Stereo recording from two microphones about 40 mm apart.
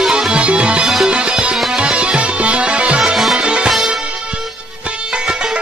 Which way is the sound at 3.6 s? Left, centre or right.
Centre.